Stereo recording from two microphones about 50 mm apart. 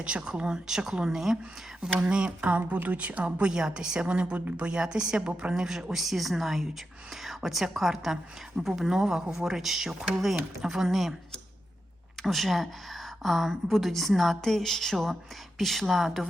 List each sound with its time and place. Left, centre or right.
0.0 s a woman's voice: centre
1.8 s a woman's voice: centre
2.6 s a woman's voice: right; by 11.1 s centre
12.2 s speech: centre